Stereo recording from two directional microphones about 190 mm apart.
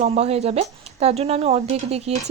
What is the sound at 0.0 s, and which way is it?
Speech, 35° right (ahead or behind).